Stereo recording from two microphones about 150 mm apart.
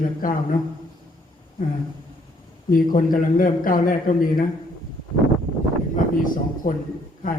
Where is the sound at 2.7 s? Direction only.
70° left (ahead or behind).